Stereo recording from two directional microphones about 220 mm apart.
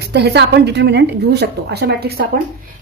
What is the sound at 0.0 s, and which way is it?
A woman's voice, 50° right (ahead or behind).